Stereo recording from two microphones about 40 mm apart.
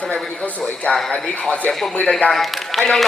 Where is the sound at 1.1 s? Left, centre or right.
Left.